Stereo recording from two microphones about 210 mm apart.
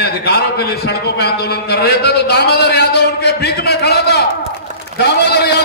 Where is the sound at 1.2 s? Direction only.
50° left (ahead or behind).